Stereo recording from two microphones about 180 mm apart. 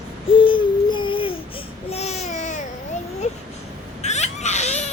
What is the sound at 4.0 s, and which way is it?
Baby cry, 40° left (ahead or behind).